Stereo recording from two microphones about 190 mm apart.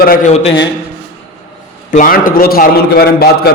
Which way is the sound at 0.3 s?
30° left (ahead or behind).